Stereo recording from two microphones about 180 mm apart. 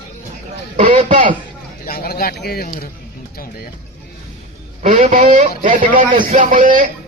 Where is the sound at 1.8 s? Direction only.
55° left (ahead or behind).